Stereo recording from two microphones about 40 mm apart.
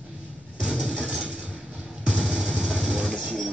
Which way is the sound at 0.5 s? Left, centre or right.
Right.